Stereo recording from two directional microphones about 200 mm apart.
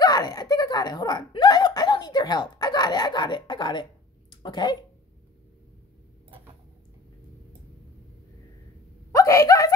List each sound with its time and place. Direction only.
0.0 s speech: 20° left (ahead or behind)
9.1 s speech: 15° left (ahead or behind)